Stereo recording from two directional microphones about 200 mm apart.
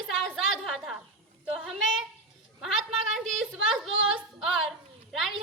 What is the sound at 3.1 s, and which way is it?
A woman's voice, centre (ahead or behind).